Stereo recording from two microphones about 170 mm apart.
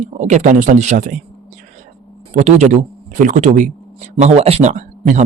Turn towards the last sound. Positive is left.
turn(degrees=-45)  # may be behind; listen again after turning